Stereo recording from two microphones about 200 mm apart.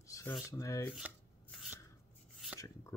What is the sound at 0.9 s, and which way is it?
Chopping, 5° right (ahead or behind).